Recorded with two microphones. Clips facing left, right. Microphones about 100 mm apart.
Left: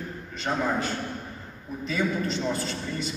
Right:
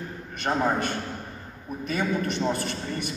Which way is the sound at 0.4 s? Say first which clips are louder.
Right 2 dB; 50° right (ahead or behind).